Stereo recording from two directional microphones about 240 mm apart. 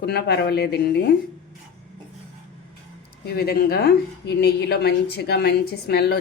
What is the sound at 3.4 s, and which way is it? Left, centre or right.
Speech, left.